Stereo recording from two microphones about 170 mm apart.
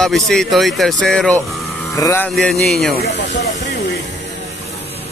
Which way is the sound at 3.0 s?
70° left (ahead or behind).